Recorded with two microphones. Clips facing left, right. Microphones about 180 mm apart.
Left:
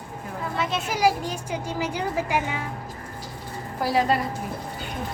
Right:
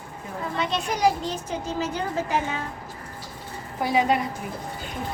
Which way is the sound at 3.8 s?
Centre (ahead or behind).